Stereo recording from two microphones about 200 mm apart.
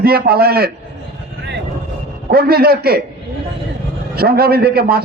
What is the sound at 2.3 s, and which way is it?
Speech, 50° right (ahead or behind).